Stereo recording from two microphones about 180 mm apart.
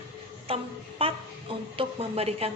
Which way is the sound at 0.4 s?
30° right (ahead or behind).